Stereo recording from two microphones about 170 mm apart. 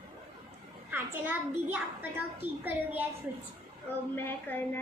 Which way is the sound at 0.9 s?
10° right (ahead or behind).